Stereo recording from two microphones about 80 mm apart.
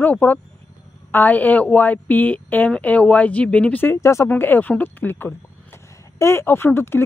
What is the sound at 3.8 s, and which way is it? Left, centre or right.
A woman's voice, left.